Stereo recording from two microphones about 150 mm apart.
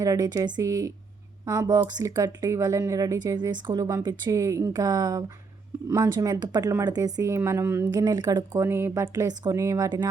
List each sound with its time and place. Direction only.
0.0 s speech: 25° right (ahead or behind)